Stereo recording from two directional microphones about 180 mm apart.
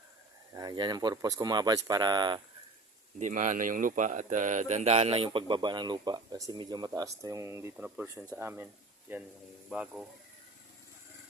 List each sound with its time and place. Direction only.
0.5 s speech: 25° right (ahead or behind)
3.2 s speech: 45° right (ahead or behind); by 10.0 s 5° right (ahead or behind)